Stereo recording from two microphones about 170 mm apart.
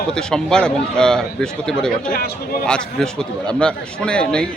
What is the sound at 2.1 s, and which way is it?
Speech, 60° left (ahead or behind).